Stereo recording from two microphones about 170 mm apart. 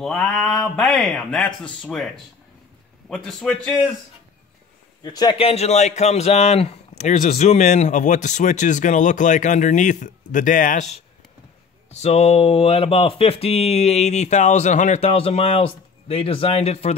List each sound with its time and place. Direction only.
0.0 s speech: 5° left (ahead or behind)
3.1 s speech: centre (ahead or behind)
5.0 s a man's voice: 25° left (ahead or behind)